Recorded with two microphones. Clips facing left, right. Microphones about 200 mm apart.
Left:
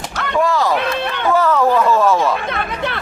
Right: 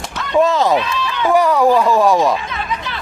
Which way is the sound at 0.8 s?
60° left (ahead or behind).